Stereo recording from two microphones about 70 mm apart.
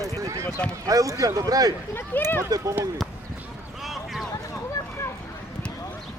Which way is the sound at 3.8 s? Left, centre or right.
Centre.